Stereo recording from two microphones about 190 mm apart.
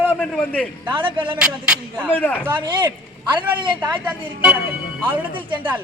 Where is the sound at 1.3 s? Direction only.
5° right (ahead or behind).